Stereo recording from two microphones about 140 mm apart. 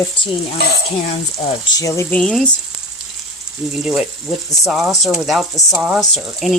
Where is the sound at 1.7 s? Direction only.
20° left (ahead or behind).